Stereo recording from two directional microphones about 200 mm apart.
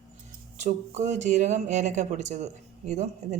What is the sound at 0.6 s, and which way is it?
Speech, 35° right (ahead or behind).